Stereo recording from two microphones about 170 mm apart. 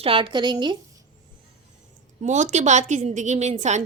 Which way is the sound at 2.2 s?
45° right (ahead or behind).